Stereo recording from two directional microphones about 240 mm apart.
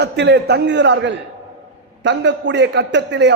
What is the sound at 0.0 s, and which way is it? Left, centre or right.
A man's voice, right.